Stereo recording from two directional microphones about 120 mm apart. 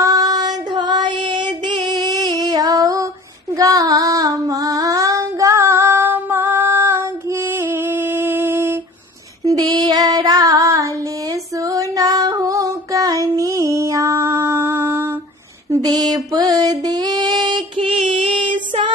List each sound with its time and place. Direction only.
0.0 s child singing: 30° right (ahead or behind)
3.5 s female singing: 30° right (ahead or behind)
9.4 s child singing: 30° right (ahead or behind)
11.6 s female singing: 30° right (ahead or behind)
13.4 s music: 25° right (ahead or behind)
15.7 s a sound: 30° right (ahead or behind)